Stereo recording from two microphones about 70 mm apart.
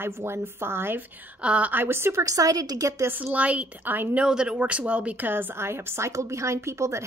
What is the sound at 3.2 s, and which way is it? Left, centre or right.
A woman's voice, right.